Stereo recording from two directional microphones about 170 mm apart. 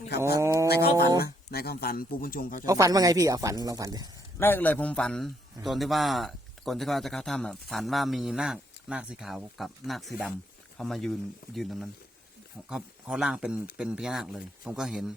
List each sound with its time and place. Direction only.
0.3 s cat: 20° right (ahead or behind)
1.2 s speech: 65° left (ahead or behind)
2.6 s speech: 20° right (ahead or behind)
4.4 s a man's voice: 15° left (ahead or behind)